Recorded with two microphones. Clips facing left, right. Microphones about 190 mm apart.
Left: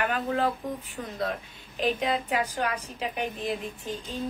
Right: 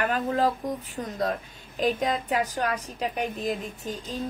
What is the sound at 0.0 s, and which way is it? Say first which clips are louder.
A woman's voice: right 2 dB; 40° right (ahead or behind).